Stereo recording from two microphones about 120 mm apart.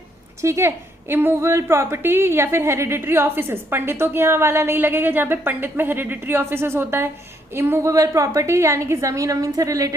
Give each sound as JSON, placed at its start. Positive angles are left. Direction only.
{"t": 0.4, "sound": "a woman's voice", "side_deg": -20}